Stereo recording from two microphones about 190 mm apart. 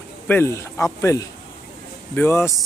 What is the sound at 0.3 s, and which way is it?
Speech, 10° left (ahead or behind).